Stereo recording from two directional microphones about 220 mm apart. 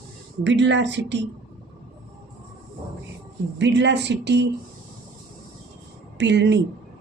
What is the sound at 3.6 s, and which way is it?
Speech, 50° right (ahead or behind).